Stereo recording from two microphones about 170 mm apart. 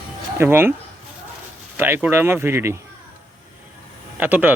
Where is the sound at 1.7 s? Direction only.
10° right (ahead or behind).